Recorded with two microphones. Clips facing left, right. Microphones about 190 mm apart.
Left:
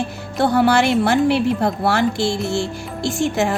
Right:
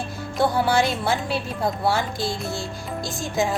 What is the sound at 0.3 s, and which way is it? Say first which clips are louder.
Speech: left 5 dB; 70° left (ahead or behind).